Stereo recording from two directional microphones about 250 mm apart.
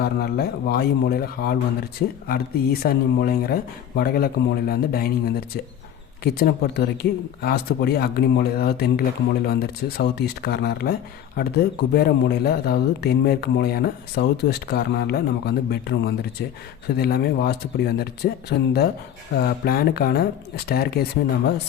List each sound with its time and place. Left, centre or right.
0.0 s speech: left